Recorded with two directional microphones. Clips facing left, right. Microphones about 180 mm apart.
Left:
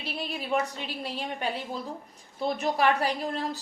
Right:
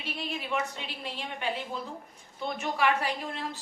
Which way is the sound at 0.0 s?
40° left (ahead or behind).